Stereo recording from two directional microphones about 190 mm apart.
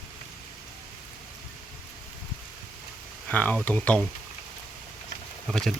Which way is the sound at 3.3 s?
10° left (ahead or behind).